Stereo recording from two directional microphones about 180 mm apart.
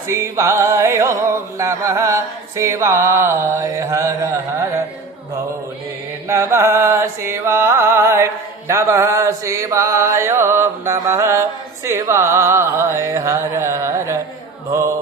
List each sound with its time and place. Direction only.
0.1 s music: 15° right (ahead or behind)
6.2 s music: 15° right (ahead or behind)